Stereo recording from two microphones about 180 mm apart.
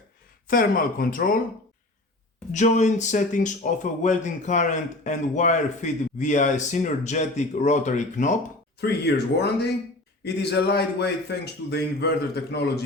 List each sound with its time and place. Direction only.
0.4 s speech: 50° left (ahead or behind)
2.5 s speech: 40° left (ahead or behind)
8.8 s a man's voice: 65° left (ahead or behind)